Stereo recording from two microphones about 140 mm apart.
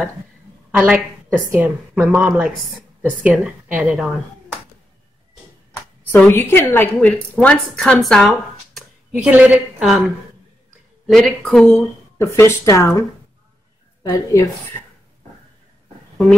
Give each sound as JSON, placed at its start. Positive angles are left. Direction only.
{"t": 0.7, "sound": "a woman's voice", "side_deg": -10}
{"t": 6.1, "sound": "a woman's voice", "side_deg": 15}
{"t": 9.1, "sound": "a woman's voice", "side_deg": -10}
{"t": 12.2, "sound": "speech", "side_deg": 20}
{"t": 14.0, "sound": "speech", "side_deg": 25}